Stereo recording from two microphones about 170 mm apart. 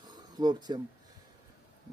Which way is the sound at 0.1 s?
25° right (ahead or behind).